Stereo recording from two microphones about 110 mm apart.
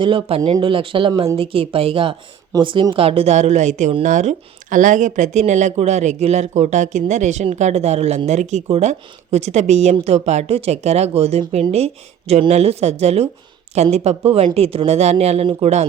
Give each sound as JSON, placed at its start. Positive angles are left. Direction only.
{"t": 0.0, "sound": "speech", "side_deg": -55}
{"t": 4.9, "sound": "a woman's voice", "side_deg": -90}
{"t": 8.3, "sound": "a woman's voice", "side_deg": -90}
{"t": 14.3, "sound": "speech", "side_deg": -65}
{"t": 15.6, "sound": "speech", "side_deg": -90}